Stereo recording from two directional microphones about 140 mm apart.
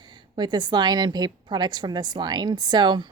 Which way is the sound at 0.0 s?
30° right (ahead or behind).